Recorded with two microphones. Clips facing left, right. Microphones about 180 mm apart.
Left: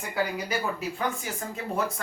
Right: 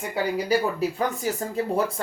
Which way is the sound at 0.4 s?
35° right (ahead or behind).